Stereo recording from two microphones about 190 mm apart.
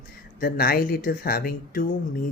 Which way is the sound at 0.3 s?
50° left (ahead or behind).